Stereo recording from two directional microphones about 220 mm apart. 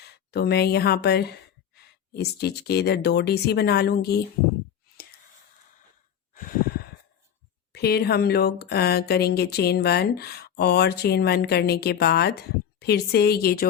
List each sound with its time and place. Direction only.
0.1 s speech: 50° left (ahead or behind)
6.3 s a sound: 40° left (ahead or behind)
7.7 s speech: 45° left (ahead or behind)